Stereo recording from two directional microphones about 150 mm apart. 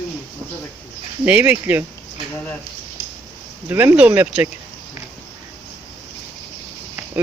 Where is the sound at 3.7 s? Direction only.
15° right (ahead or behind).